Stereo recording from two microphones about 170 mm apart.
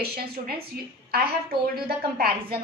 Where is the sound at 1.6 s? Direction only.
60° right (ahead or behind).